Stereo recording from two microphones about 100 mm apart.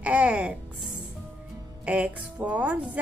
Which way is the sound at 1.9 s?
15° right (ahead or behind).